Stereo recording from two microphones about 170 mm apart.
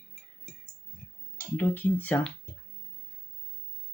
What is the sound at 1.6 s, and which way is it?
Speech, 15° left (ahead or behind).